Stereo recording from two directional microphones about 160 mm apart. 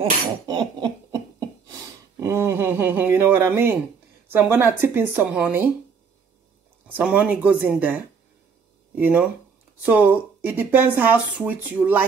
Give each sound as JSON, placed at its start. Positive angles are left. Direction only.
{"t": 0.5, "sound": "a sound", "side_deg": -30}
{"t": 4.3, "sound": "speech", "side_deg": -15}
{"t": 6.9, "sound": "speech", "side_deg": -5}
{"t": 9.0, "sound": "speech", "side_deg": -10}